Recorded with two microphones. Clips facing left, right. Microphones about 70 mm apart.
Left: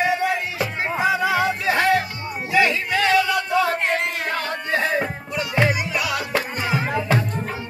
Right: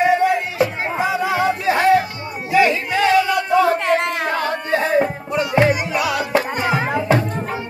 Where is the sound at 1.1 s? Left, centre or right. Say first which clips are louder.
Right 2 dB; centre; by 3.3 s right.